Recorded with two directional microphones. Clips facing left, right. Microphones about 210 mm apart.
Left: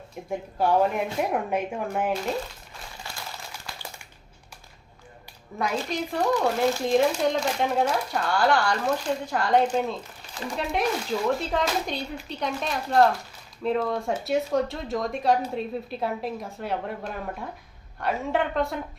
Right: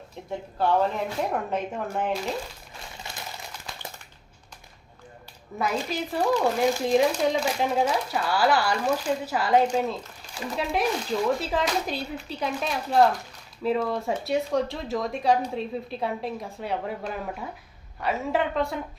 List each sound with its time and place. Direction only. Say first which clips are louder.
0.3 s speech: left 1 dB; 10° left (ahead or behind)
3.1 s a sound: even; 20° right (ahead or behind)
5.5 s speech: even; centre (ahead or behind)